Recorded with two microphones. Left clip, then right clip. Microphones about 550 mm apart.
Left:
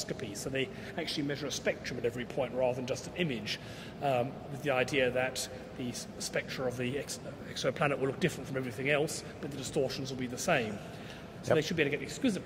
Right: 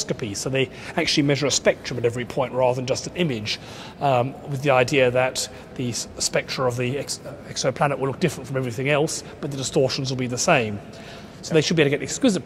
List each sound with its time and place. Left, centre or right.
0.0 s speech: right